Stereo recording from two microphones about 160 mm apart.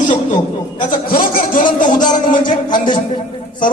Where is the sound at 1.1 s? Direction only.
65° left (ahead or behind).